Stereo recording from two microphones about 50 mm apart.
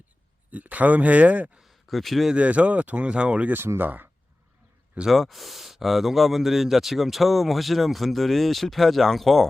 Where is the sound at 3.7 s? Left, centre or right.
Right.